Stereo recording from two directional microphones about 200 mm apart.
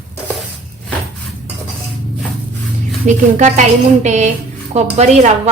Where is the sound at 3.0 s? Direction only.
35° right (ahead or behind).